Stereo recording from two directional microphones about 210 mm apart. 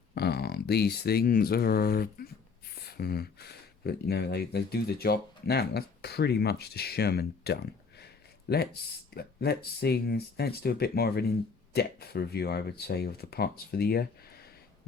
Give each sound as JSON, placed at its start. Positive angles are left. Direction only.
{"t": 0.1, "sound": "speech", "side_deg": 50}